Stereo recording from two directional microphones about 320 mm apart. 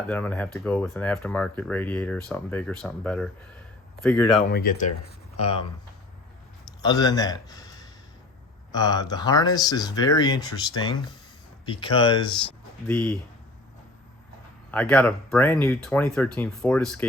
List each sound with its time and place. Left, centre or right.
0.1 s speech: centre
4.4 s speech: left
6.8 s a man's voice: centre
12.9 s speech: centre
14.7 s speech: centre